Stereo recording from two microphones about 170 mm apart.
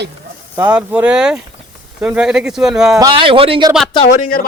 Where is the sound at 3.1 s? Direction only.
30° right (ahead or behind).